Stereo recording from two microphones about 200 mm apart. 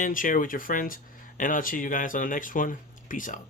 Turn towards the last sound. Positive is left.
turn(degrees=40)  # may be behind; listen again after turning